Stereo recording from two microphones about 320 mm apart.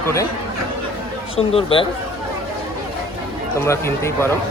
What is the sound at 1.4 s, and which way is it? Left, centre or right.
Speech, centre.